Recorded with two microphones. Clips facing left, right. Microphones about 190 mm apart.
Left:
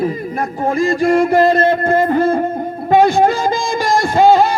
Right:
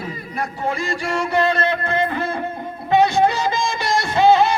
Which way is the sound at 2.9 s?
45° left (ahead or behind).